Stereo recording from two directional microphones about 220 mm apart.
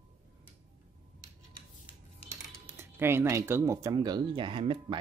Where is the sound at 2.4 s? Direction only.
10° right (ahead or behind).